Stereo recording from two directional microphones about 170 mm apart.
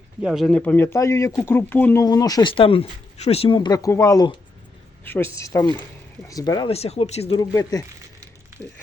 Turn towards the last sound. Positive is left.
turn(degrees=20)  # may be behind; listen again after turning